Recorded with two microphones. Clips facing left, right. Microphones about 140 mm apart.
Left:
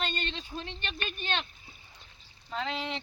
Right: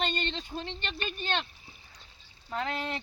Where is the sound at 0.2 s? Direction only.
10° left (ahead or behind).